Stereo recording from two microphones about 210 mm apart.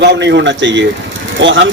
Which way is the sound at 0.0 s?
55° right (ahead or behind).